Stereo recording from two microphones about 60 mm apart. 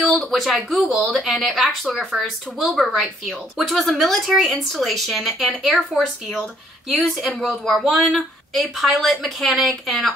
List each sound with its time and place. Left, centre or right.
0.0 s speech: centre